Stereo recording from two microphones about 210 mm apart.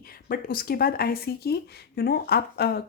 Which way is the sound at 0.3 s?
45° left (ahead or behind).